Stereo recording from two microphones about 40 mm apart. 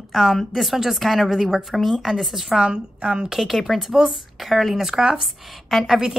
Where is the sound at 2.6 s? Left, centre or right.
Right.